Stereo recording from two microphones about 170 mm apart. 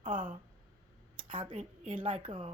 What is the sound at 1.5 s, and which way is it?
Speech, 45° right (ahead or behind).